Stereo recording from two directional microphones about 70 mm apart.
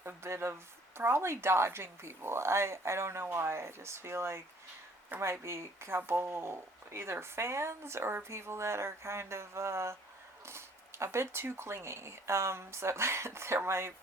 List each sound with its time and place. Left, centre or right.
0.0 s speech: right